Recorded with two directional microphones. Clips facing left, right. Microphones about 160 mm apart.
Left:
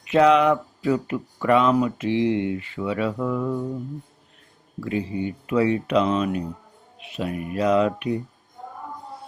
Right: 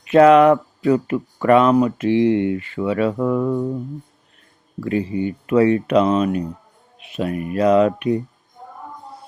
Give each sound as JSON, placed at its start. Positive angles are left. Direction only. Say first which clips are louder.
{"t": 0.1, "sound": "speech", "louder": "right 6 dB", "side_deg": -50}
{"t": 4.8, "sound": "speech", "louder": "right 5 dB", "side_deg": -60}